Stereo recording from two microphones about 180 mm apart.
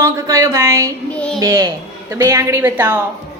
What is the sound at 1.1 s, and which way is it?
Speech, 5° left (ahead or behind).